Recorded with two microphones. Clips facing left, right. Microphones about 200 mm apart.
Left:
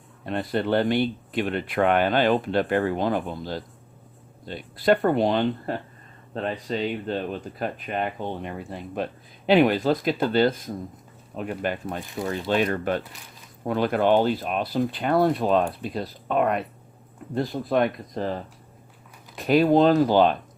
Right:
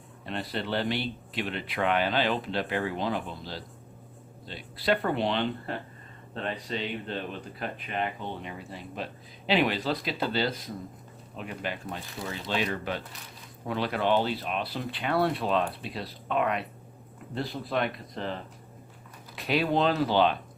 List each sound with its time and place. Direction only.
0.3 s speech: 50° left (ahead or behind)